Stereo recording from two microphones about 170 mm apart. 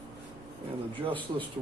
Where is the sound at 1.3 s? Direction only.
25° right (ahead or behind).